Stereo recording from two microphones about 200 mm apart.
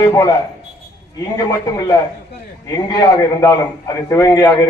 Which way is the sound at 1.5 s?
15° left (ahead or behind).